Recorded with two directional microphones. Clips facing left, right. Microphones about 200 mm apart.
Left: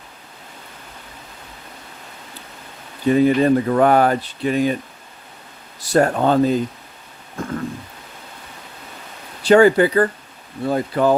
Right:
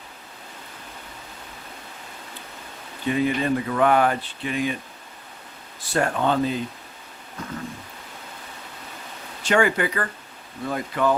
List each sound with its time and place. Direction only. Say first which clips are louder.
3.1 s speech: left 8 dB; 40° left (ahead or behind)
5.9 s speech: left 6 dB; 40° left (ahead or behind)
7.4 s a sound: left 8 dB; 45° left (ahead or behind)
9.4 s speech: left 9 dB; 35° left (ahead or behind)